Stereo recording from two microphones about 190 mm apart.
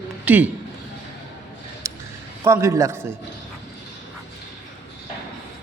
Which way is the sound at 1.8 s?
15° right (ahead or behind).